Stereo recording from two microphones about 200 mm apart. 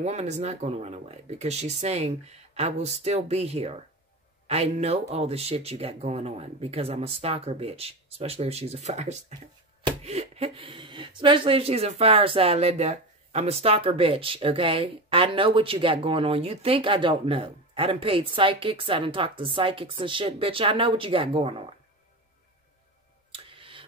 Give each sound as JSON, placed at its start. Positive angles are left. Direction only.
{"t": 0.0, "sound": "speech", "side_deg": -35}
{"t": 23.3, "sound": "tick", "side_deg": -25}